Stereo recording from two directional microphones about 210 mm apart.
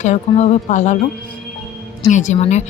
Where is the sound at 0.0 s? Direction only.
30° left (ahead or behind).